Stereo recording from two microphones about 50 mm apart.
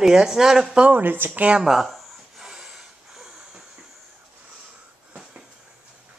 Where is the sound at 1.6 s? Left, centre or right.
Centre.